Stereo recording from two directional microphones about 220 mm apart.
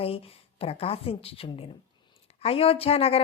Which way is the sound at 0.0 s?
25° left (ahead or behind).